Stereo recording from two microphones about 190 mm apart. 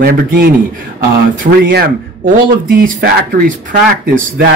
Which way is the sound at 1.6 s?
50° right (ahead or behind).